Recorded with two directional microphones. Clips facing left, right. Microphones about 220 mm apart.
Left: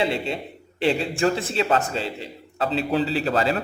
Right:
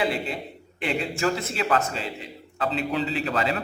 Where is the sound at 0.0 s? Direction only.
25° left (ahead or behind).